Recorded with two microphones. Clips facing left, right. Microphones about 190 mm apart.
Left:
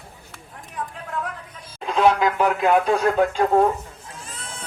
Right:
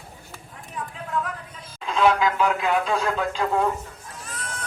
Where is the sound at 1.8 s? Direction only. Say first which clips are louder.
Left 2 dB; 50° left (ahead or behind).